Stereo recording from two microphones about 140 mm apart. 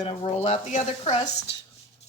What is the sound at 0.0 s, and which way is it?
Speech, 35° left (ahead or behind).